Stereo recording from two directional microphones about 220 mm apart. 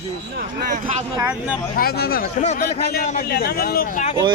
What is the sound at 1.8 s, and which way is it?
A man's voice, 45° left (ahead or behind).